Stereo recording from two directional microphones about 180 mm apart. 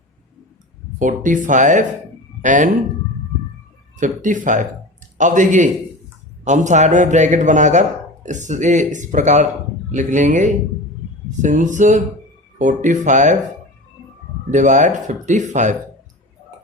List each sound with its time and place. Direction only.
0.9 s a man's voice: 45° right (ahead or behind)
3.9 s a man's voice: 45° right (ahead or behind)
14.5 s a man's voice: 45° right (ahead or behind)